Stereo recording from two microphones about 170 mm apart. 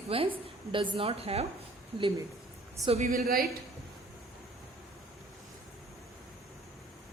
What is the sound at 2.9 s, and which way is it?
Speech, 50° right (ahead or behind).